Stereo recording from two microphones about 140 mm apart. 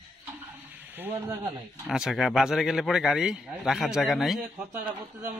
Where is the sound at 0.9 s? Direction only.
15° right (ahead or behind).